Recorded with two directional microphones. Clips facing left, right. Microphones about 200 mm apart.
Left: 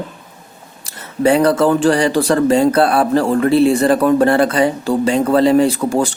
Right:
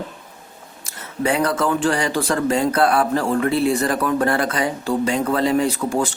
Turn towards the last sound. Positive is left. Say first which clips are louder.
# left 6 dB
turn(degrees=30)  # may be behind; listen again after turning